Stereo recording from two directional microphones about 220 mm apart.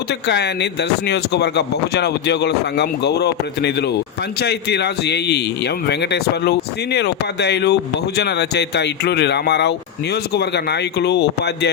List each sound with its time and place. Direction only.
0.1 s speech: 50° left (ahead or behind)